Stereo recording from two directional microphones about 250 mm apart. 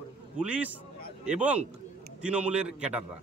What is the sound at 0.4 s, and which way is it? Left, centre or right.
A man's voice, centre.